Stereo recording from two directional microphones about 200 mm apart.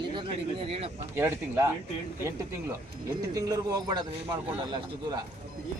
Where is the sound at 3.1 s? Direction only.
15° right (ahead or behind).